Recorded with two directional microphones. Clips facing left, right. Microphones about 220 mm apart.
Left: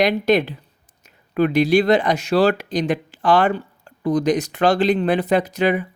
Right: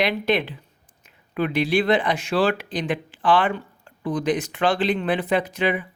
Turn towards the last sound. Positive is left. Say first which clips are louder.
# left 4 dB
turn(degrees=40)  # may be behind; listen again after turning